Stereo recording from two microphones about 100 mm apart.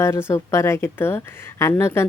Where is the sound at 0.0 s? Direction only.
25° left (ahead or behind).